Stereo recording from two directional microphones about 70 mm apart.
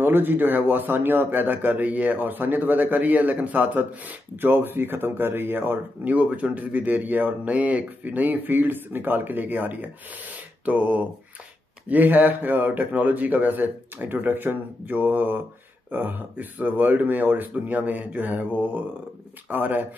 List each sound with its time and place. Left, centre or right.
0.0 s speech: right
19.5 s speech: right